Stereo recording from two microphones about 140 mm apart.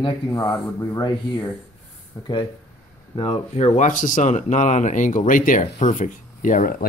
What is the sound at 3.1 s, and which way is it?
Speech, 40° left (ahead or behind).